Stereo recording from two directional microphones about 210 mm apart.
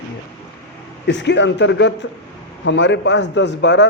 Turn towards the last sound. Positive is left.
turn(degrees=55)  # may be behind; listen again after turning